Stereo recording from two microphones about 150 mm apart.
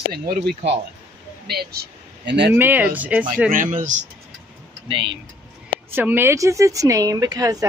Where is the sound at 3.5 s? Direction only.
60° right (ahead or behind).